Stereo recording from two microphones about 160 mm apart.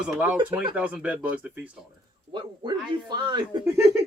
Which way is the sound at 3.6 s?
15° right (ahead or behind).